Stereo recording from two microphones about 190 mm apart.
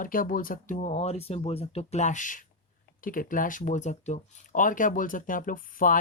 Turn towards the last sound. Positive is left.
turn(degrees=45)  # may be behind; listen again after turning